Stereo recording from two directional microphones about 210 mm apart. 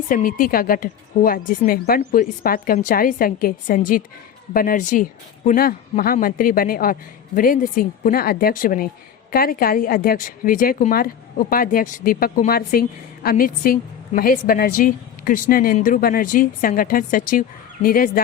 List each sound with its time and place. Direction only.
0.1 s a woman's voice: 40° left (ahead or behind)